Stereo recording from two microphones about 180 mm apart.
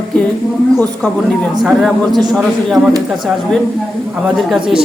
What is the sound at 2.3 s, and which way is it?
Speech, centre (ahead or behind).